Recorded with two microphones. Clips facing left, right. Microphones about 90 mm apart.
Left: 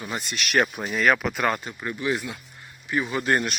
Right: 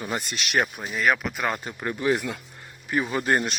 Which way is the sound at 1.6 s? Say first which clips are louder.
Right 2 dB; 35° right (ahead or behind).